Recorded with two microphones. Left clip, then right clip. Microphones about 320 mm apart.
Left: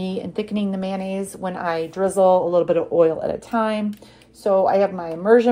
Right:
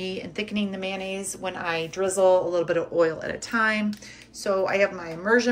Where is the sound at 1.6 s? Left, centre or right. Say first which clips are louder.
Left 5 dB; centre.